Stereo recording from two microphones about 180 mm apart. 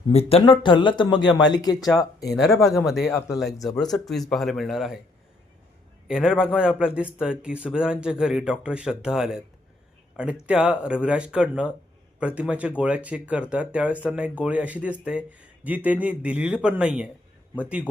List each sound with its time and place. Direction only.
0.1 s a man's voice: 35° left (ahead or behind)
2.3 s a man's voice: centre (ahead or behind)
6.1 s a man's voice: 5° right (ahead or behind)
10.4 s a man's voice: 5° right (ahead or behind)